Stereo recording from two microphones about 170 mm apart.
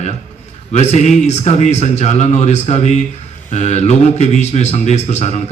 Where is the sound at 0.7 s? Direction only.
40° left (ahead or behind).